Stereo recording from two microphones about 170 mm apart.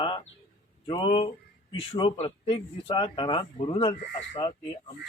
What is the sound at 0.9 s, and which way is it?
Speech, 30° left (ahead or behind).